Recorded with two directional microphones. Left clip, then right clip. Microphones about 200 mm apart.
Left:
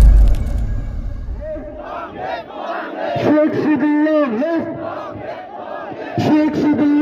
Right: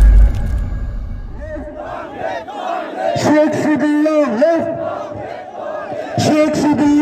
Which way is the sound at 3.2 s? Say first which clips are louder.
Right 1 dB; 45° right (ahead or behind).